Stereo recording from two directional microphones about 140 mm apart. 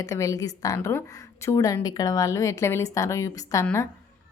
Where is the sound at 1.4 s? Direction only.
25° left (ahead or behind).